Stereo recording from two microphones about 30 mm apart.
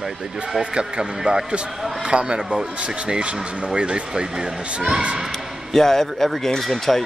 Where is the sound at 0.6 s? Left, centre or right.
Right.